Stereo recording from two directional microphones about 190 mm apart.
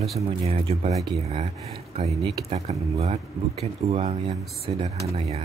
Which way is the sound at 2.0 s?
35° right (ahead or behind).